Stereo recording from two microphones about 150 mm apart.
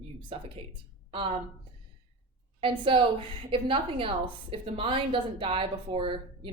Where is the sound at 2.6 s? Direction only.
35° right (ahead or behind).